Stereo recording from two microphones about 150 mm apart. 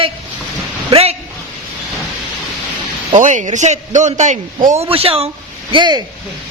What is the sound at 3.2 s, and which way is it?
A man's voice, 55° right (ahead or behind).